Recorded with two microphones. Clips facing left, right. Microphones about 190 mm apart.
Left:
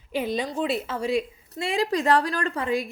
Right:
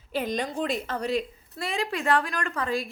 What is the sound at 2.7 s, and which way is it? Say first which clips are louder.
Speech: left 4 dB; 20° left (ahead or behind).